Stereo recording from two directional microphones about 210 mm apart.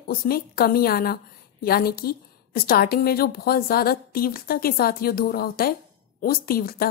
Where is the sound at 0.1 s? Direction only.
45° left (ahead or behind).